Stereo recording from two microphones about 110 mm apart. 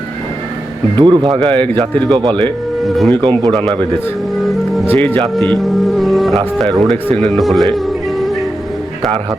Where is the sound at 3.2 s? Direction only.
45° right (ahead or behind).